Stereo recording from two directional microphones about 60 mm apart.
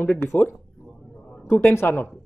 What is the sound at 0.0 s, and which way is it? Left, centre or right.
Speech, left.